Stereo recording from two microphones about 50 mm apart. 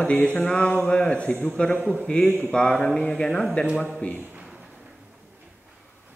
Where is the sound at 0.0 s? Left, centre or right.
Left.